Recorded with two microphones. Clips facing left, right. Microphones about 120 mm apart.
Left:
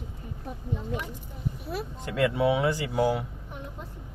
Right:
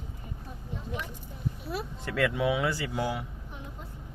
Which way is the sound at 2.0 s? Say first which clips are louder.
Left 3 dB; 20° left (ahead or behind).